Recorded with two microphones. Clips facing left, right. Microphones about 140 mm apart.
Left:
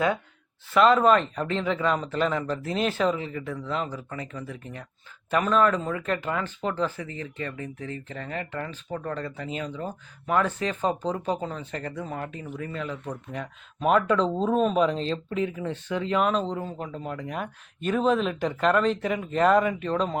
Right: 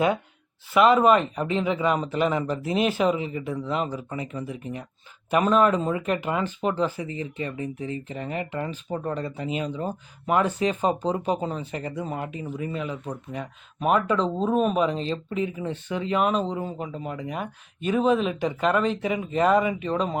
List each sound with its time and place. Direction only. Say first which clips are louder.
0.7 s speech: right 1 dB; 10° right (ahead or behind)